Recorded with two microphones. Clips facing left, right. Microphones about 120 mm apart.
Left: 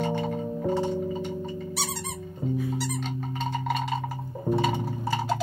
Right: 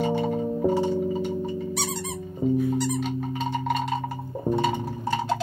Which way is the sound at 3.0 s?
Centre (ahead or behind).